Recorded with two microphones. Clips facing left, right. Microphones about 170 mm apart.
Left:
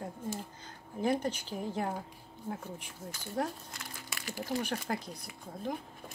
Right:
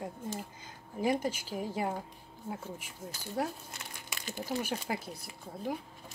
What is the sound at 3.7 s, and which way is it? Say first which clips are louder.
Crumpling: even; 25° right (ahead or behind).